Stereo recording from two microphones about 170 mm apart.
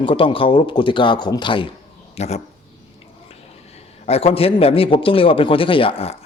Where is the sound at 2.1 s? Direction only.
40° left (ahead or behind).